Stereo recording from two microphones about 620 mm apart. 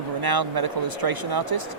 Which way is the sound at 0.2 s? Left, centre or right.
Right.